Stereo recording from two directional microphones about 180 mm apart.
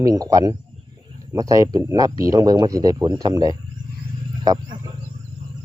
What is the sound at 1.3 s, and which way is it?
Speech, 20° right (ahead or behind).